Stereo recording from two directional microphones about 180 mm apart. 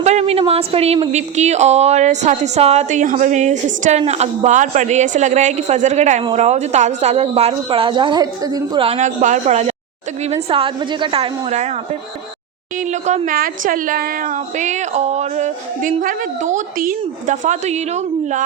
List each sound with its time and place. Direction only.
0.0 s speech: 35° right (ahead or behind)
10.5 s speech: 30° right (ahead or behind)
12.8 s a woman's voice: 40° right (ahead or behind)